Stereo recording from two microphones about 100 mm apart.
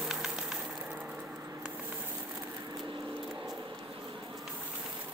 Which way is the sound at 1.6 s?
15° right (ahead or behind).